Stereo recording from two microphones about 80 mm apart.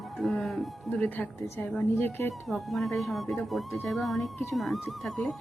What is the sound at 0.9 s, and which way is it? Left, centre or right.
Speech, centre.